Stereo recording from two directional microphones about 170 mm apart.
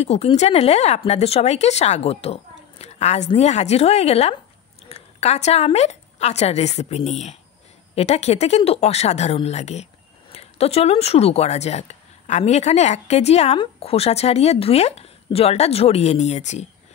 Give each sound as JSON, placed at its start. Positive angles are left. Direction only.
{"t": 0.0, "sound": "a woman's voice", "side_deg": 40}